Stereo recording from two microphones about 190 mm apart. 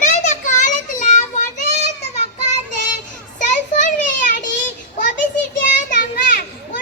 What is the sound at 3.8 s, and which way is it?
Children playing, 45° left (ahead or behind).